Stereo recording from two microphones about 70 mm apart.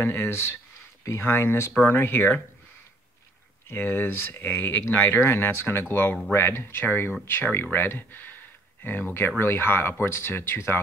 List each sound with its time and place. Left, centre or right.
0.0 s speech: left
3.6 s speech: left